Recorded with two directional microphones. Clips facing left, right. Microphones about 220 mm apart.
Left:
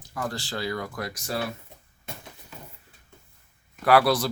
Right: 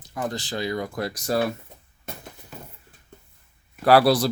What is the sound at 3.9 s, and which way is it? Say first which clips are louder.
Speech: right 3 dB; 35° right (ahead or behind).